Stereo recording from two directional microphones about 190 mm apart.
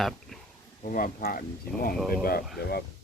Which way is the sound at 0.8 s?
45° left (ahead or behind).